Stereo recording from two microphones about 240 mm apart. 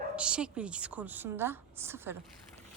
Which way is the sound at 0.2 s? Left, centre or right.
Centre.